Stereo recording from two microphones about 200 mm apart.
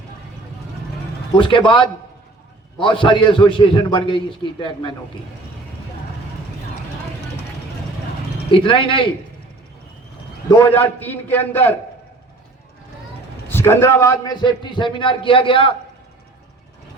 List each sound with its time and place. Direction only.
1.4 s a man's voice: 25° left (ahead or behind)
8.4 s a man's voice: 25° left (ahead or behind)
10.8 s a man's voice: 10° left (ahead or behind)
13.5 s a man's voice: 10° left (ahead or behind)